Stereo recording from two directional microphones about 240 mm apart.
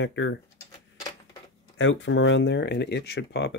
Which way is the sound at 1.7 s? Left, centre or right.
Left.